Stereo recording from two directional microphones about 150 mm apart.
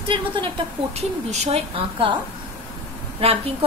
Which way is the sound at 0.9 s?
45° right (ahead or behind).